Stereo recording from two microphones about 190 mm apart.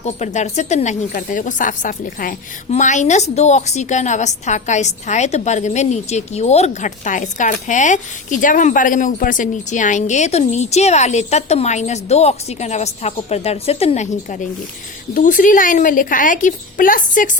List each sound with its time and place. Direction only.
0.0 s a woman's voice: 35° left (ahead or behind)